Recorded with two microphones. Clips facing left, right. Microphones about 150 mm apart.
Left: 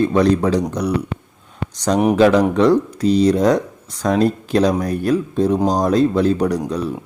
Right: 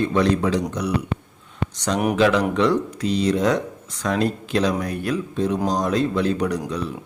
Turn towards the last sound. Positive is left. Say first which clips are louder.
# left 5 dB
turn(degrees=40)  # may be behind; listen again after turning